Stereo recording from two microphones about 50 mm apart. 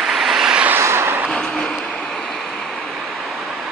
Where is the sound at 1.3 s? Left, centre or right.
Centre.